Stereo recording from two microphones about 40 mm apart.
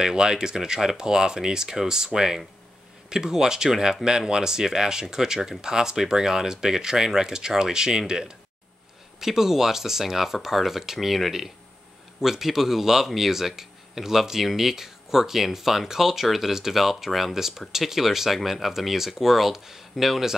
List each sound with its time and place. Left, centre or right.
0.0 s speech: centre
9.2 s speech: centre